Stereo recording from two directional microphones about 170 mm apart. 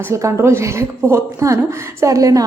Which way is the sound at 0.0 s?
15° right (ahead or behind).